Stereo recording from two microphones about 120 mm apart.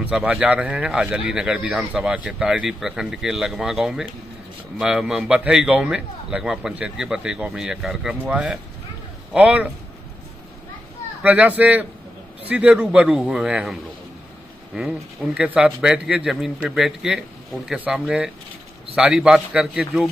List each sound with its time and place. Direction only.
0.0 s a man's voice: 10° right (ahead or behind)
11.2 s speech: 15° right (ahead or behind)
14.8 s a man's voice: 5° right (ahead or behind)